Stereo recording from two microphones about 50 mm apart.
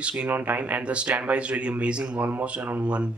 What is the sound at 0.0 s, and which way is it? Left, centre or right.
Speech, right.